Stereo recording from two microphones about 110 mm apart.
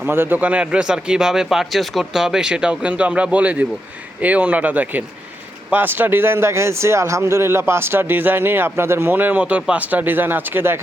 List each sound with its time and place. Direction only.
0.0 s speech: 20° right (ahead or behind)